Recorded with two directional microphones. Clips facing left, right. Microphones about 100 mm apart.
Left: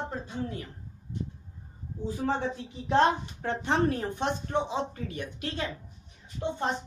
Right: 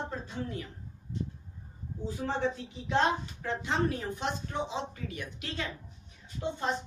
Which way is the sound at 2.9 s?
45° left (ahead or behind).